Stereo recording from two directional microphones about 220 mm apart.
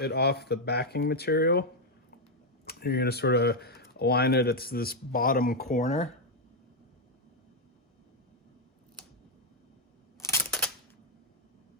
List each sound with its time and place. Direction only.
0.0 s speech: 45° left (ahead or behind)
2.6 s speech: 45° left (ahead or behind)
10.2 s camera: 10° left (ahead or behind)